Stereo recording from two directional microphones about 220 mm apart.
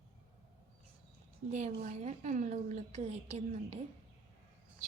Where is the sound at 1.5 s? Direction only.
35° right (ahead or behind).